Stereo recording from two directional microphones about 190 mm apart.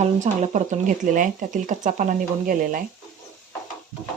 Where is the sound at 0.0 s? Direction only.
40° right (ahead or behind).